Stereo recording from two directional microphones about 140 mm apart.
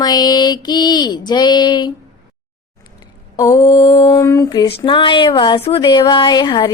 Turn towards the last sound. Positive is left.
turn(degrees=30)  # may be behind; listen again after turning